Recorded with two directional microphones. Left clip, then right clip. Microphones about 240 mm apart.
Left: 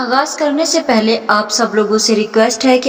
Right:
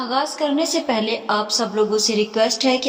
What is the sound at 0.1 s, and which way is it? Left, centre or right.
A woman's voice, centre.